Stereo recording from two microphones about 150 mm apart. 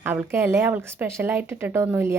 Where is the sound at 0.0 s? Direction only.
15° right (ahead or behind).